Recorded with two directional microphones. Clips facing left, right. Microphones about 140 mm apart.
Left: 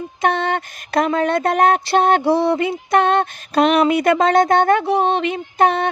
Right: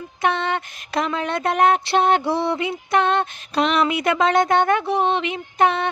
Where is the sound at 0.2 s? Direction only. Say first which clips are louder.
Left 3 dB; 45° left (ahead or behind).